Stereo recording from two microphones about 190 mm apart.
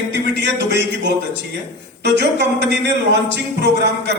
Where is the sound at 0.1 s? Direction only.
65° right (ahead or behind).